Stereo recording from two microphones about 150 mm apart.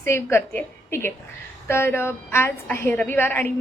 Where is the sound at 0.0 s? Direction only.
15° left (ahead or behind).